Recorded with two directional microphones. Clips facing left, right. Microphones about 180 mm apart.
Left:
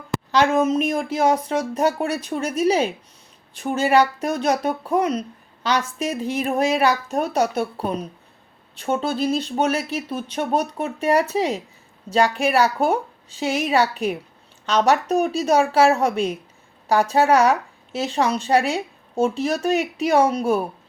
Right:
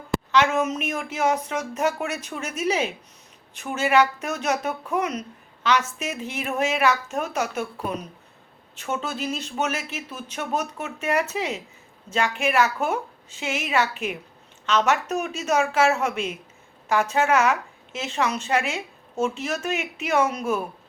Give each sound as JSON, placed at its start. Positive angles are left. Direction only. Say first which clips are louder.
{"t": 0.3, "sound": "speech", "louder": "left 4 dB", "side_deg": 35}